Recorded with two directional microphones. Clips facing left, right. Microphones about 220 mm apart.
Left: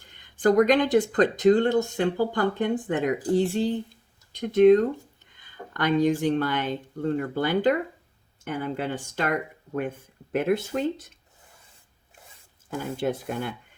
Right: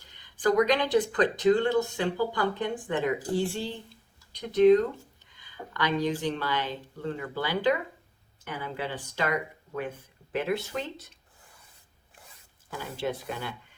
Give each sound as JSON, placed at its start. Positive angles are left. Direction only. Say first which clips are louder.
{"t": 0.0, "sound": "a sound", "louder": "left 4 dB", "side_deg": 50}
{"t": 0.9, "sound": "speech", "louder": "left 3 dB", "side_deg": 45}
{"t": 4.4, "sound": "speech", "louder": "left 3 dB", "side_deg": 50}
{"t": 12.7, "sound": "speech", "louder": "left 5 dB", "side_deg": 50}